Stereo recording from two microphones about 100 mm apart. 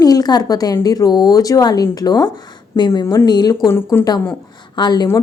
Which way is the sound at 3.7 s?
25° left (ahead or behind).